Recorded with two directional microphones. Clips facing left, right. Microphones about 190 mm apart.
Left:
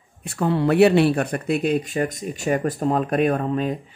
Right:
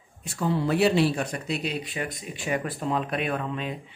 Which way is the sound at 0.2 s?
60° left (ahead or behind).